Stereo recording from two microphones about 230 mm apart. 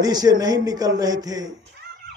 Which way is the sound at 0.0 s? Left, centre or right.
Centre.